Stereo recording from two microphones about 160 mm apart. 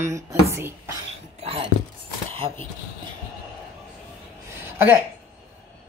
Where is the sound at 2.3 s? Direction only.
35° right (ahead or behind).